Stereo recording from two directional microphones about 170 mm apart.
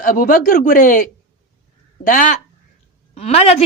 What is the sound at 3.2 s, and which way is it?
Speech, 40° left (ahead or behind).